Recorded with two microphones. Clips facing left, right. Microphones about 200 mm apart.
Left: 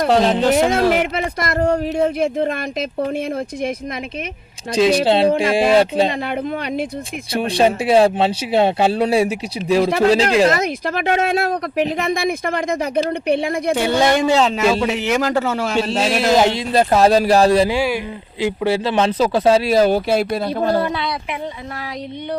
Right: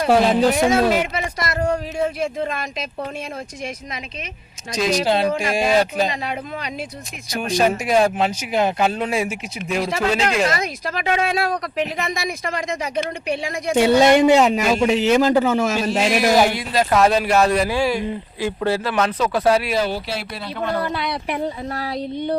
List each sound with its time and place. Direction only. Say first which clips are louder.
0.1 s speech: right 1 dB; 10° right (ahead or behind)
0.7 s speech: left 1 dB; 55° left (ahead or behind)
4.7 s speech: left 5 dB; 30° left (ahead or behind)
7.3 s speech: left 3 dB; 30° left (ahead or behind)
10.8 s speech: left 1 dB; 55° left (ahead or behind)
13.7 s a man's voice: right 5 dB; 20° right (ahead or behind)
15.7 s speech: left 2 dB; 30° left (ahead or behind)
16.0 s speech: even; 15° right (ahead or behind)
16.3 s speech: left 2 dB; 25° left (ahead or behind)
18.3 s speech: left 4 dB; 15° left (ahead or behind)
18.9 s speech: left 4 dB; 30° left (ahead or behind)
19.7 s speech: left 8 dB; 50° left (ahead or behind)